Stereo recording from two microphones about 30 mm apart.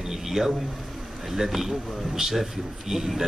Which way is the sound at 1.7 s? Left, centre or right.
Centre.